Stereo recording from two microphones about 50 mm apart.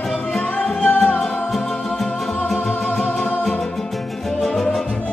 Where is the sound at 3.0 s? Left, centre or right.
Left.